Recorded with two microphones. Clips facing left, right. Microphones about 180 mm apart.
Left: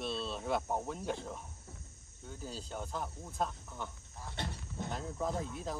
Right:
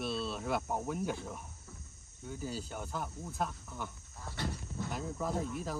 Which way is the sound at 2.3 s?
5° right (ahead or behind).